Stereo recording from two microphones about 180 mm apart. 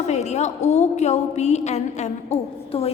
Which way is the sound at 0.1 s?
40° left (ahead or behind).